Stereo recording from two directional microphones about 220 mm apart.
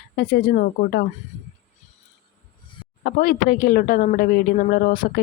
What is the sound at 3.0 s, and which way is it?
Speech, 40° left (ahead or behind).